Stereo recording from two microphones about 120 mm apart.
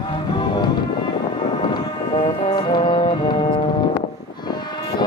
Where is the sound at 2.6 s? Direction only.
40° left (ahead or behind).